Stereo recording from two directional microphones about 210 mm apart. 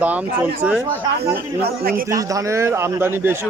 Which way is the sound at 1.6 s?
45° right (ahead or behind).